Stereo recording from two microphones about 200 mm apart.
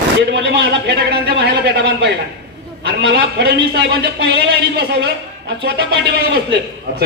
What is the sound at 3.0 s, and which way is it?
A man's voice, 55° right (ahead or behind).